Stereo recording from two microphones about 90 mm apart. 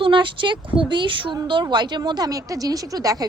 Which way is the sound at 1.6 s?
55° right (ahead or behind).